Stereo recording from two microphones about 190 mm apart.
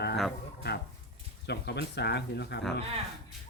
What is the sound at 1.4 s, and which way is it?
Speech, 60° left (ahead or behind).